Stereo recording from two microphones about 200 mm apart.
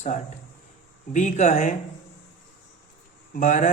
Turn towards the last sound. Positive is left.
turn(degrees=40)  # may be behind; listen again after turning